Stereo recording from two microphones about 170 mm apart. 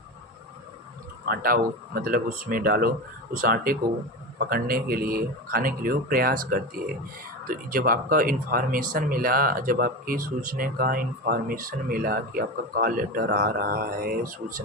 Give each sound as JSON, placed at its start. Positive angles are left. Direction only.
{"t": 1.2, "sound": "speech", "side_deg": -60}
{"t": 7.4, "sound": "speech", "side_deg": -55}